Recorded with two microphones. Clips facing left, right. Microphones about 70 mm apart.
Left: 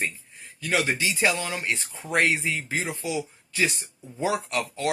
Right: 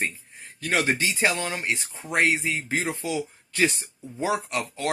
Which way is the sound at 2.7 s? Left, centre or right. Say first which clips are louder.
Right 3 dB; right.